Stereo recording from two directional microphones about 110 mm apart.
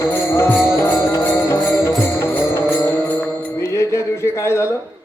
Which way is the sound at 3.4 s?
25° left (ahead or behind).